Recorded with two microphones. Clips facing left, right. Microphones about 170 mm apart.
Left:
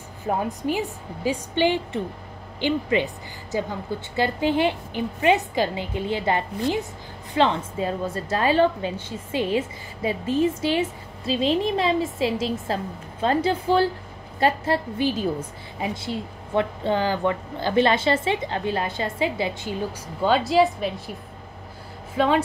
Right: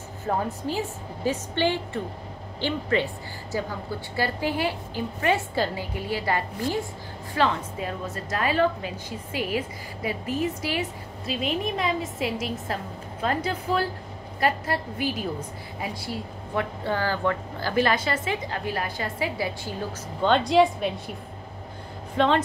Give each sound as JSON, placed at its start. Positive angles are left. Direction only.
{"t": 0.3, "sound": "a woman's voice", "side_deg": 15}
{"t": 4.2, "sound": "a woman's voice", "side_deg": 20}
{"t": 20.2, "sound": "a woman's voice", "side_deg": 5}